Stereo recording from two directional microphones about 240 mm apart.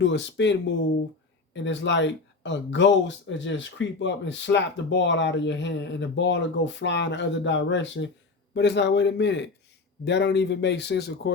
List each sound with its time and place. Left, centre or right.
0.0 s speech: left
1.5 s speech: left